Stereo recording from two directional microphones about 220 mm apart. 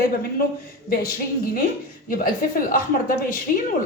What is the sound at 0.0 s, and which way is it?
Speech, 45° left (ahead or behind).